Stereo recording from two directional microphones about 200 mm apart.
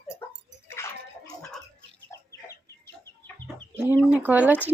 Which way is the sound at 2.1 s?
15° left (ahead or behind).